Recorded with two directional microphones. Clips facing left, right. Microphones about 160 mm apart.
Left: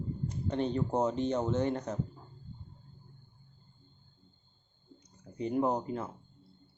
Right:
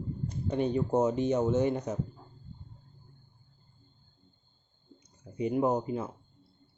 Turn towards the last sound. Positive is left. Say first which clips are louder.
# right 2 dB
turn(degrees=-5)  # may be behind; listen again after turning